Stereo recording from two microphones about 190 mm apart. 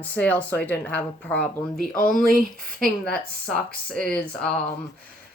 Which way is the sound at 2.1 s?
45° left (ahead or behind).